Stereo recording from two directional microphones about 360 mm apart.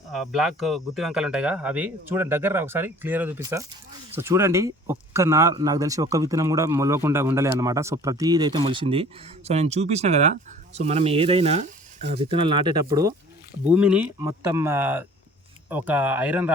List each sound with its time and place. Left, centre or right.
0.1 s speech: centre